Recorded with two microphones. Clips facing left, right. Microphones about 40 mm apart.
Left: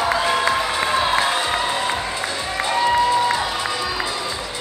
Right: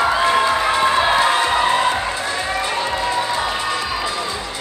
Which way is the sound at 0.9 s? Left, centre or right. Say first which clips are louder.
Right 1 dB; right.